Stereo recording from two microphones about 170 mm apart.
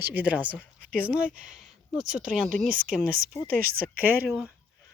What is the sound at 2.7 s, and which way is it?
Speech, 55° right (ahead or behind).